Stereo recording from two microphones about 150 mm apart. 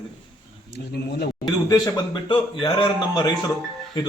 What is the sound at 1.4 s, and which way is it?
A man's voice, 25° left (ahead or behind).